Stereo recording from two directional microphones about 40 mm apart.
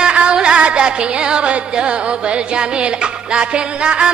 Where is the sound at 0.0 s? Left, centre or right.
Right.